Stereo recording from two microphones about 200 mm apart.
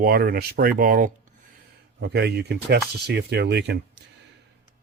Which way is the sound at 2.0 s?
55° right (ahead or behind).